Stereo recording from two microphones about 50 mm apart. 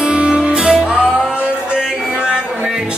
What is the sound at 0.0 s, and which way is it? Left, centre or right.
Music, centre.